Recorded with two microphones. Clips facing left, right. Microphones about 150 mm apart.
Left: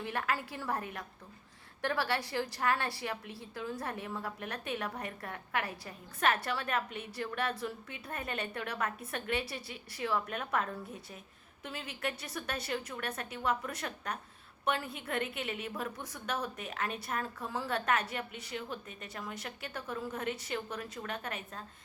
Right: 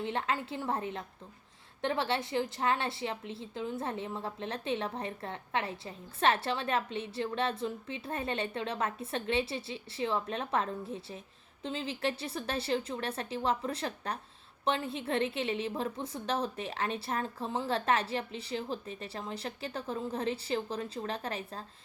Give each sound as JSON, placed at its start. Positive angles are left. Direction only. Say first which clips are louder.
{"t": 0.0, "sound": "a woman's voice", "louder": "right 2 dB", "side_deg": -25}